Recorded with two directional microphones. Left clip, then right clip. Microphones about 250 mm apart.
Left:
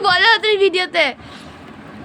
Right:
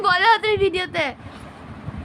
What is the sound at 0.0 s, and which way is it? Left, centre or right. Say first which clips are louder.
Speech: left 3 dB; centre.